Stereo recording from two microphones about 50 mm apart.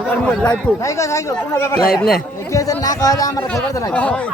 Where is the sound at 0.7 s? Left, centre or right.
Left.